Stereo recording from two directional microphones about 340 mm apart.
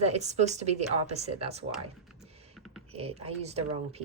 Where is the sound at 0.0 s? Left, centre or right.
Centre.